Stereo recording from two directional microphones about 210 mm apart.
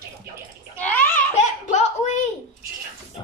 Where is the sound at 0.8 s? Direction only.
10° left (ahead or behind).